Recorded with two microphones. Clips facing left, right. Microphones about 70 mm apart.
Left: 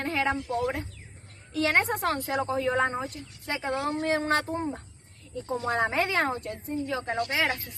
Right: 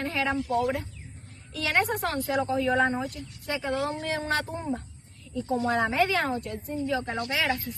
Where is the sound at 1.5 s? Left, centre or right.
Left.